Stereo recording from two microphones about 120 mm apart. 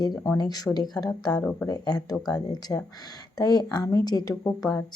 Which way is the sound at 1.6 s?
35° left (ahead or behind).